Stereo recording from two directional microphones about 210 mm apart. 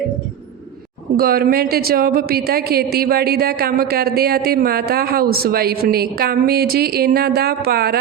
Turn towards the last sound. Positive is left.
turn(degrees=-45)  # may be behind; listen again after turning